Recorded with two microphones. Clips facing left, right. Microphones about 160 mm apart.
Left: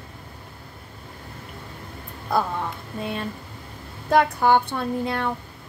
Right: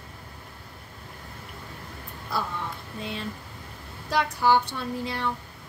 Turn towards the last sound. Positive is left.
turn(degrees=55)  # may be behind; listen again after turning